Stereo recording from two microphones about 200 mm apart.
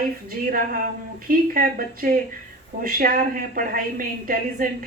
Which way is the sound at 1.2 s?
45° right (ahead or behind).